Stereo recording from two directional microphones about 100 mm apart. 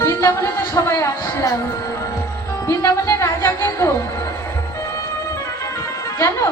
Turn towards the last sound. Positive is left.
turn(degrees=30)  # may be behind; listen again after turning